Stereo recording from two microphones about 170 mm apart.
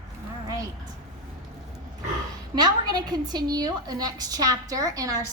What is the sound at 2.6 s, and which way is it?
A woman's voice, 25° right (ahead or behind).